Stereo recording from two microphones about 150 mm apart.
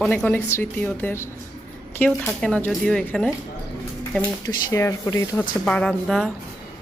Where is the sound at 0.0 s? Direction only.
5° left (ahead or behind).